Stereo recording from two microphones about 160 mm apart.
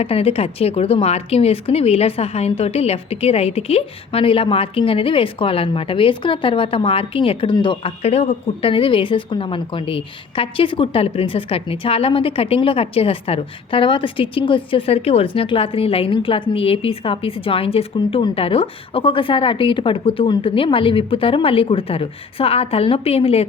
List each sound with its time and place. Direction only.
0.0 s speech: 40° left (ahead or behind)